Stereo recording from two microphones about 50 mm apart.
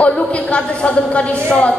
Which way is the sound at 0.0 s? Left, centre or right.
Left.